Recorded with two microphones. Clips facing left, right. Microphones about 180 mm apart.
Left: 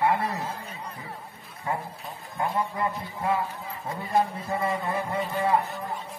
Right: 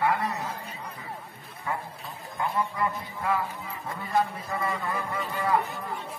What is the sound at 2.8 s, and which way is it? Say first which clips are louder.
Speech: left 1 dB; 25° left (ahead or behind).